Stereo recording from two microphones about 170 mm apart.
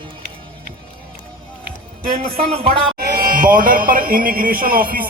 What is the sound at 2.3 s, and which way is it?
Speech, 35° right (ahead or behind).